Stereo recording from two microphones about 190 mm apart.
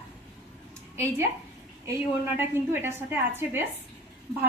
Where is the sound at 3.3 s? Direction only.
10° right (ahead or behind).